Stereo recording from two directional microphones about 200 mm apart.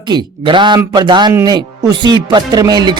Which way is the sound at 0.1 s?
25° right (ahead or behind).